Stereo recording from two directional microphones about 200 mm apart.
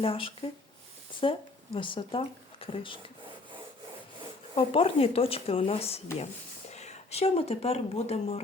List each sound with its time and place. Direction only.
0.0 s a woman's voice: 25° left (ahead or behind)
4.5 s a woman's voice: 30° left (ahead or behind)